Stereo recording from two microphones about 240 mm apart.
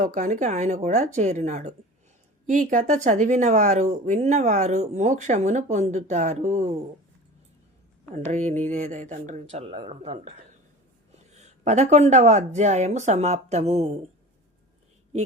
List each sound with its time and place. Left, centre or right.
0.0 s speech: right
8.3 s speech: right